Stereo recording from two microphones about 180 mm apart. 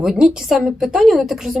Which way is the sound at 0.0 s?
5° right (ahead or behind).